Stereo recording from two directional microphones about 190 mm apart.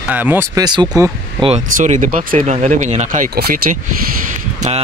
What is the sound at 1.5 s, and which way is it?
Speech, 40° right (ahead or behind).